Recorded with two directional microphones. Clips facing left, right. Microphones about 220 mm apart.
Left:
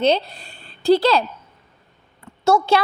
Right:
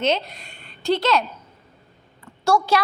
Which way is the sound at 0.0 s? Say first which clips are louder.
Left 4 dB; 30° left (ahead or behind).